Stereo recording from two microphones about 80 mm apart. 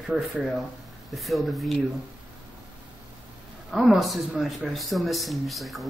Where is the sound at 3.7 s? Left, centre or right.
Centre.